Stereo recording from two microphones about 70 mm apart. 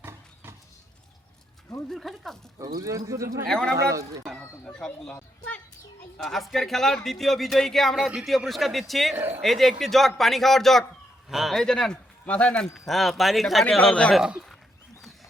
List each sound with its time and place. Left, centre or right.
1.9 s a man's voice: centre
2.6 s speech: right
3.5 s speech: centre
3.8 s speech: right
4.4 s speech: centre
6.2 s a man's voice: centre
9.1 s speech: right
9.4 s a man's voice: centre
11.6 s speech: centre
12.7 s a man's voice: centre
14.2 s a man's voice: centre